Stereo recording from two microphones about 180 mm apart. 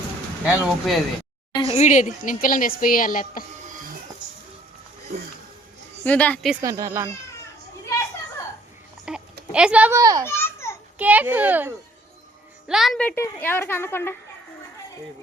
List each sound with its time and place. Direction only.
0.4 s a child's voice: 5° right (ahead or behind)
1.5 s a woman's voice: 35° left (ahead or behind); by 3.4 s 50° left (ahead or behind)
3.6 s printer: 45° right (ahead or behind)
5.1 s speech: 50° right (ahead or behind)
6.1 s a woman's voice: 10° left (ahead or behind)
6.6 s speech: 20° right (ahead or behind)
9.1 s a child's voice: 5° right (ahead or behind)
10.0 s speech: 20° right (ahead or behind)
10.2 s a sound: 15° left (ahead or behind)
10.9 s a child's voice: 10° right (ahead or behind); by 14.2 s 15° left (ahead or behind)